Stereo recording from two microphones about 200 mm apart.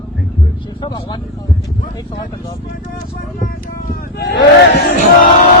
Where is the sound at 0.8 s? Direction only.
20° left (ahead or behind).